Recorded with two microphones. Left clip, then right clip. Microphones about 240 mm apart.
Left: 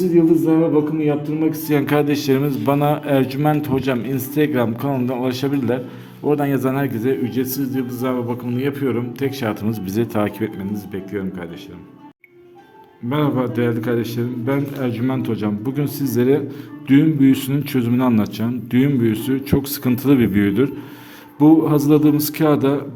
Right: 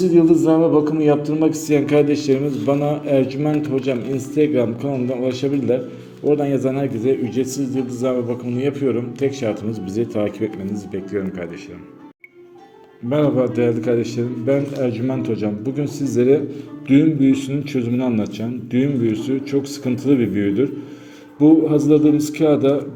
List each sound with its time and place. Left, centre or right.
0.7 s speech: centre
1.6 s a man's voice: centre
13.1 s a man's voice: centre